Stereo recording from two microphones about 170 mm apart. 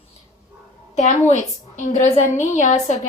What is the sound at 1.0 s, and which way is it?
A woman's voice, 45° left (ahead or behind).